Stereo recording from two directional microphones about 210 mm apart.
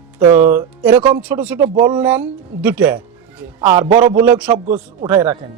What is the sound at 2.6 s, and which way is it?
Speech, 5° right (ahead or behind).